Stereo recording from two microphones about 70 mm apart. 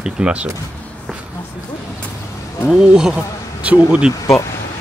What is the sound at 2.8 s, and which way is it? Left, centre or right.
Speech, centre.